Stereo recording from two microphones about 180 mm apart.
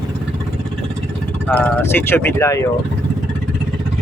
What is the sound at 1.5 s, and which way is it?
Speech, 10° left (ahead or behind).